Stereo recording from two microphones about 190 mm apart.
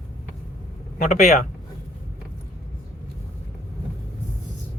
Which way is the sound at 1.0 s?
40° left (ahead or behind).